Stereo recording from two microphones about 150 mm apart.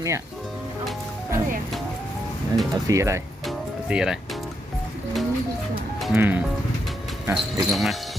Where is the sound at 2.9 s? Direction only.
20° right (ahead or behind).